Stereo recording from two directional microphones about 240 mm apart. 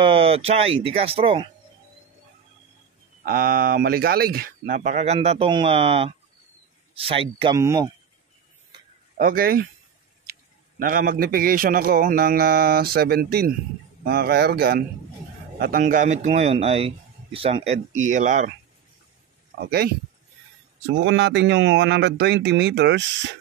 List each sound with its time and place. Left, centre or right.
0.0 s a man's voice: right
3.3 s a man's voice: right; by 7.9 s centre
9.1 s speech: right
10.8 s a man's voice: right
19.6 s speech: right
21.0 s speech: right